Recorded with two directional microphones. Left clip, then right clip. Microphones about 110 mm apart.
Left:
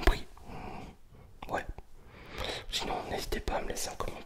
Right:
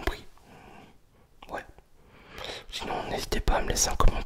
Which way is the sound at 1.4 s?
15° left (ahead or behind).